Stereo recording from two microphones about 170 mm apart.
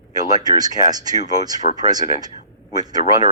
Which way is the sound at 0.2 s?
20° right (ahead or behind).